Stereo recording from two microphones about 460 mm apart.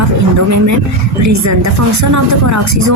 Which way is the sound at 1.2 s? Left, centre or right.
Right.